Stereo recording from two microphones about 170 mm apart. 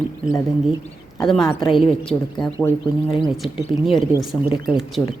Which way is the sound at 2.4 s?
20° left (ahead or behind).